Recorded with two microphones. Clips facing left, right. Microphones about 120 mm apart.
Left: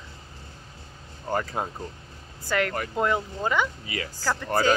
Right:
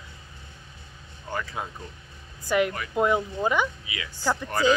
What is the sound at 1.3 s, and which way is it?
Speech, 40° left (ahead or behind).